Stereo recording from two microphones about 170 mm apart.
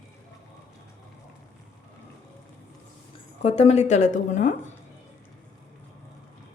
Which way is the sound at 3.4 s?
35° left (ahead or behind).